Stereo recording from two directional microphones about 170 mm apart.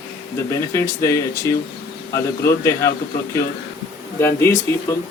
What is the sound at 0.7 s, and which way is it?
Speech, 15° left (ahead or behind).